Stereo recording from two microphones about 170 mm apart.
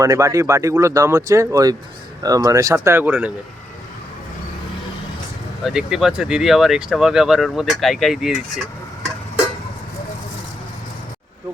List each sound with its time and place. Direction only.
0.0 s speech: 20° right (ahead or behind)
5.6 s speech: 5° right (ahead or behind)